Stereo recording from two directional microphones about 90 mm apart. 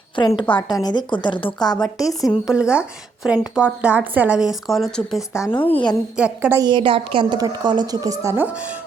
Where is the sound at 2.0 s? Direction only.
40° left (ahead or behind).